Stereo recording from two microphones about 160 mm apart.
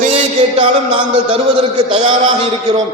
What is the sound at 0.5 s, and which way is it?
A man's voice, 35° right (ahead or behind).